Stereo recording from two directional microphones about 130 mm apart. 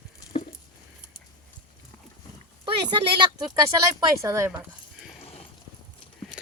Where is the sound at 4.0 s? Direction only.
25° right (ahead or behind).